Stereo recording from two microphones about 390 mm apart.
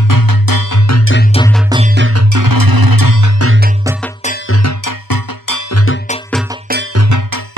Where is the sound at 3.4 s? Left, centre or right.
Right.